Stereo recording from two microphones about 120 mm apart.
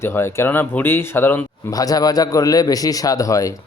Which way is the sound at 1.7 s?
30° left (ahead or behind).